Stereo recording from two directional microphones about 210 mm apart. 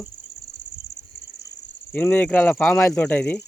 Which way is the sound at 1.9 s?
10° left (ahead or behind).